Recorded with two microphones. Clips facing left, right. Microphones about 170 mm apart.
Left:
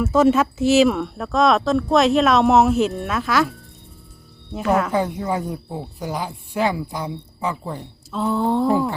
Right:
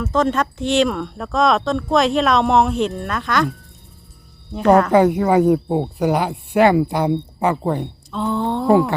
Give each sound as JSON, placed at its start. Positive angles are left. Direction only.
{"t": 0.0, "sound": "speech", "side_deg": 10}
{"t": 4.9, "sound": "speech", "side_deg": -70}
{"t": 8.1, "sound": "speech", "side_deg": 5}